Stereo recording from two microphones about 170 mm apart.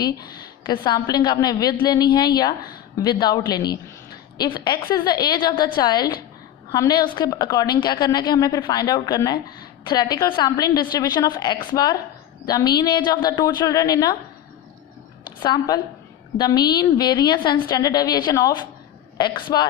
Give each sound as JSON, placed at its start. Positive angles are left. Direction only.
{"t": 0.0, "sound": "a woman's voice", "side_deg": 25}
{"t": 15.4, "sound": "a woman's voice", "side_deg": 25}